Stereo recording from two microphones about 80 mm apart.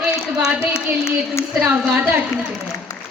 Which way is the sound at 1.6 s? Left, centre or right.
Centre.